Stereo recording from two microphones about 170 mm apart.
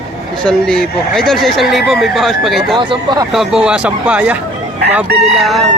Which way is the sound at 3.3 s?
5° right (ahead or behind).